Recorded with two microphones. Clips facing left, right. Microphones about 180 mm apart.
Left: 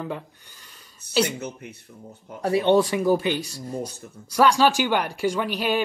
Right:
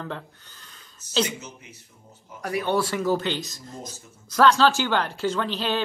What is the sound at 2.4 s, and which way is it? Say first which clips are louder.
Speech: left 6 dB; 25° left (ahead or behind).